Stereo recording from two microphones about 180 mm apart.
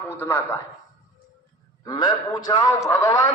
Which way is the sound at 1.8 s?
20° left (ahead or behind).